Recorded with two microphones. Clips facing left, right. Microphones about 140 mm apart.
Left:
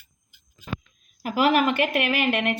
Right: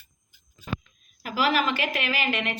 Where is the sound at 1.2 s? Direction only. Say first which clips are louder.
Left 4 dB; 50° left (ahead or behind).